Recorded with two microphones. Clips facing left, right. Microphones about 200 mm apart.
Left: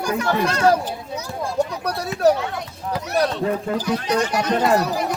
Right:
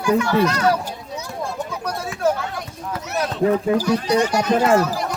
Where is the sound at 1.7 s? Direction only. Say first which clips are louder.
Left 1 dB; 35° left (ahead or behind).